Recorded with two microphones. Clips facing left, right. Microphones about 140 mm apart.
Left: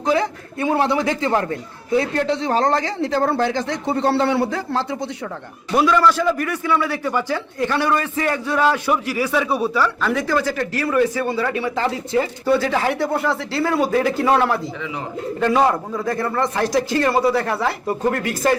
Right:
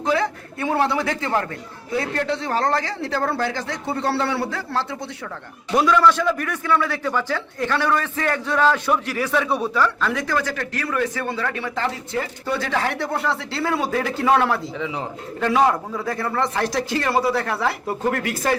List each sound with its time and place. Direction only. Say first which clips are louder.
0.0 s a man's voice: left 2 dB; 15° left (ahead or behind)
5.7 s a man's voice: left 1 dB; centre (ahead or behind)